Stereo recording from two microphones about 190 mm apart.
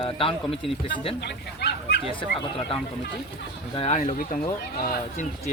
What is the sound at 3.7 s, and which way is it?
Speech, 30° left (ahead or behind).